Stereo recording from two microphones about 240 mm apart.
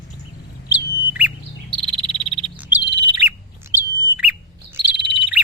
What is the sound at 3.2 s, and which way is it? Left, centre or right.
Bird, centre.